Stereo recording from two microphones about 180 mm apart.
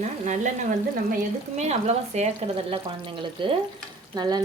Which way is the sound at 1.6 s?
40° right (ahead or behind).